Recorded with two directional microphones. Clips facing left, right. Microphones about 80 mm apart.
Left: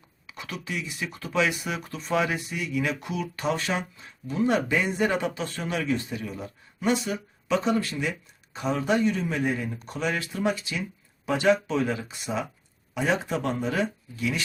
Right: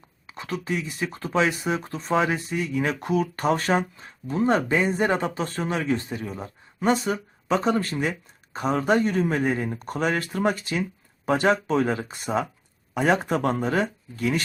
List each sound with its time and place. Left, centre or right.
0.3 s a man's voice: right